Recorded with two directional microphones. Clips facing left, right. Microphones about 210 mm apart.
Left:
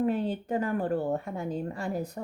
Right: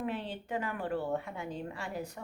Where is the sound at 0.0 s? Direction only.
40° left (ahead or behind).